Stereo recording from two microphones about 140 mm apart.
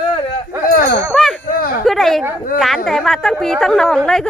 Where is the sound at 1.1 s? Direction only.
Centre (ahead or behind).